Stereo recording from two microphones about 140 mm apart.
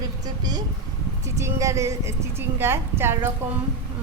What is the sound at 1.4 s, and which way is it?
A woman's voice, 20° right (ahead or behind).